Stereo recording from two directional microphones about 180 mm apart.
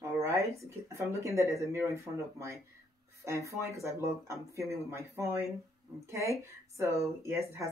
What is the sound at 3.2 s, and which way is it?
Speech, 15° right (ahead or behind).